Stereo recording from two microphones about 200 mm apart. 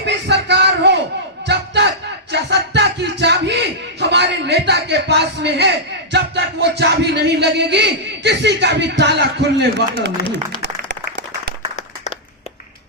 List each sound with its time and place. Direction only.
0.0 s a sound: 60° right (ahead or behind)
1.5 s crowd: 60° right (ahead or behind)
2.3 s music: 60° right (ahead or behind)
10.6 s applause: 60° right (ahead or behind)